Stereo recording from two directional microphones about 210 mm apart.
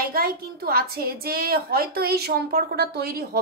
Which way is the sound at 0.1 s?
45° right (ahead or behind).